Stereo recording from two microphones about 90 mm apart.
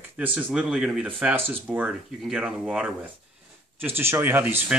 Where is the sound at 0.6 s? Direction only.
5° right (ahead or behind).